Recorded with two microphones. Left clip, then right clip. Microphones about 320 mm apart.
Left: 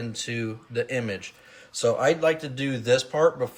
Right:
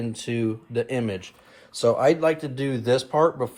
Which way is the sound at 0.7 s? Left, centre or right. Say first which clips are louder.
Left 3 dB; centre.